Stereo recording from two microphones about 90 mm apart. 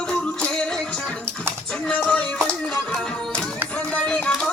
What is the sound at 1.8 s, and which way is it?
Music, 15° left (ahead or behind).